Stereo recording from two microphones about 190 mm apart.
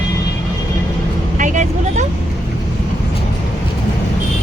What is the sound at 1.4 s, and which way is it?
Speech, 40° right (ahead or behind).